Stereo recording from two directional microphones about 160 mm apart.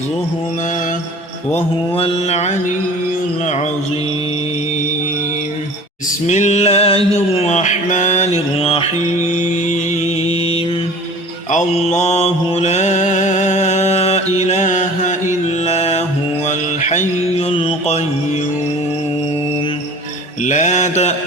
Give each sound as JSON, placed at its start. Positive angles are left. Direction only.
{"t": 2.0, "sound": "mantra", "side_deg": 40}
{"t": 6.2, "sound": "music", "side_deg": 45}
{"t": 11.5, "sound": "mantra", "side_deg": 45}
{"t": 15.6, "sound": "music", "side_deg": 40}
{"t": 16.5, "sound": "mantra", "side_deg": 50}
{"t": 17.5, "sound": "music", "side_deg": 35}
{"t": 20.4, "sound": "mantra", "side_deg": 50}